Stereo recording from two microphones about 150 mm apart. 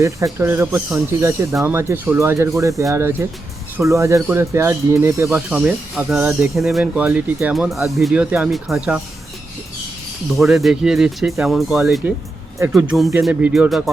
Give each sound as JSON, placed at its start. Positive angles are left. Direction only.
{"t": 0.0, "sound": "speech", "side_deg": -20}
{"t": 10.2, "sound": "speech", "side_deg": 0}